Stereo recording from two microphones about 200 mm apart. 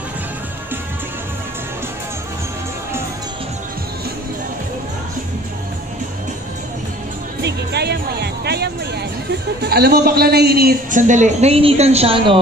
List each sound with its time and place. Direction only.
7.4 s music: 55° right (ahead or behind)
9.6 s a man's voice: 50° right (ahead or behind); by 12.4 s 30° right (ahead or behind)